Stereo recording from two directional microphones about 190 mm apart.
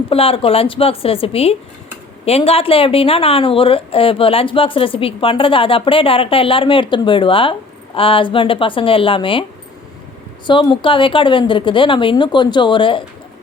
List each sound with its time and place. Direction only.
0.1 s a woman's voice: 30° left (ahead or behind)
10.4 s a woman's voice: 25° left (ahead or behind)